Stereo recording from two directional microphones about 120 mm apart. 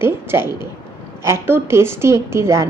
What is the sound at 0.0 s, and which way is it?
A woman's voice, 20° right (ahead or behind).